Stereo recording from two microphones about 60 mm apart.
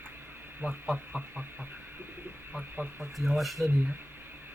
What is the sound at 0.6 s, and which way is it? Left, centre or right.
Speech, right.